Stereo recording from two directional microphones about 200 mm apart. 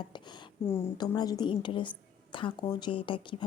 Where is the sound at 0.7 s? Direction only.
15° left (ahead or behind).